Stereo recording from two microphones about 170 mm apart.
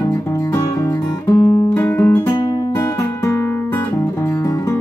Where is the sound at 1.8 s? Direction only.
15° left (ahead or behind).